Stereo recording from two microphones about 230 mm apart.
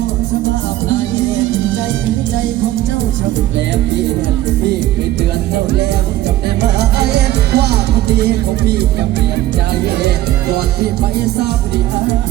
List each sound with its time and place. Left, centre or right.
0.9 s music: right
6.6 s music: right